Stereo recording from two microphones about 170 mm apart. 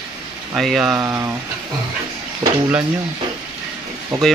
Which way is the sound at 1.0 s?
15° right (ahead or behind).